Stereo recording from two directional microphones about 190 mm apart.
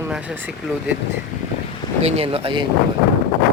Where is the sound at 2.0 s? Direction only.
30° right (ahead or behind).